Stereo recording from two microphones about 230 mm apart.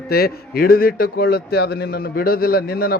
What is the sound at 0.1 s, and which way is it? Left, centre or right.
Speech, left.